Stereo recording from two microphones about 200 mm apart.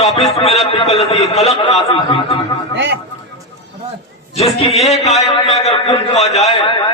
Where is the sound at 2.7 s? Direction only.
60° right (ahead or behind).